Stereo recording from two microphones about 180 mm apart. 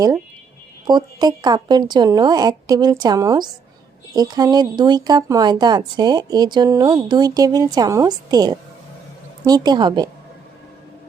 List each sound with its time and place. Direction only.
0.9 s speech: 20° right (ahead or behind)